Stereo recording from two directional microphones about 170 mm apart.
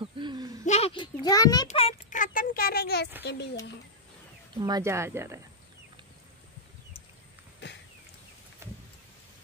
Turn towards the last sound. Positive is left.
turn(degrees=90)